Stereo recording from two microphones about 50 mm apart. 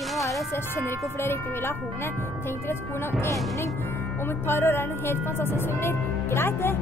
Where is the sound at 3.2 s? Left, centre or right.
Left.